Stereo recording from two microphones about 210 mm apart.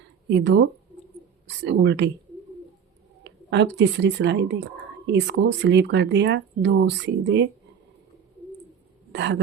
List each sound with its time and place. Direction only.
0.3 s speech: 55° right (ahead or behind)
3.2 s speech: 55° right (ahead or behind)
9.1 s speech: 55° right (ahead or behind)